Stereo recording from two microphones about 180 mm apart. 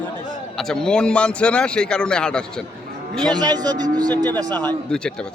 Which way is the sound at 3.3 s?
20° right (ahead or behind).